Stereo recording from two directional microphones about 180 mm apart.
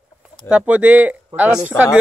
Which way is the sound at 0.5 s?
10° right (ahead or behind).